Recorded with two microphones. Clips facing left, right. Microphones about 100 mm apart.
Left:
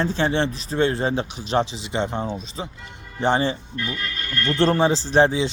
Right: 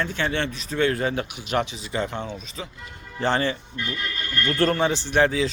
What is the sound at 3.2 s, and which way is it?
Speech, 20° left (ahead or behind).